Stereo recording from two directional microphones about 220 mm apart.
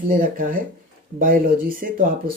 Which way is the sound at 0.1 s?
40° right (ahead or behind).